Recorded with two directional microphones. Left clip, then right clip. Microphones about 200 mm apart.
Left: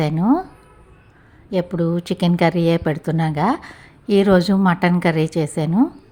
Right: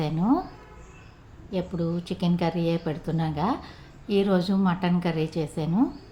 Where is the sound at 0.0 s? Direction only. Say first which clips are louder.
Left 7 dB; 40° left (ahead or behind).